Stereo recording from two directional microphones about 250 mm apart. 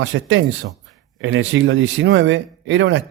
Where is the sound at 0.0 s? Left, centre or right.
Right.